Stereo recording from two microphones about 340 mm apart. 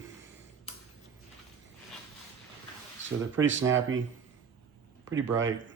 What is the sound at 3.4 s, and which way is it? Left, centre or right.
Speech, right.